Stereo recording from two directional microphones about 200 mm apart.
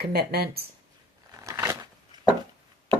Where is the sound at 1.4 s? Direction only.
15° right (ahead or behind).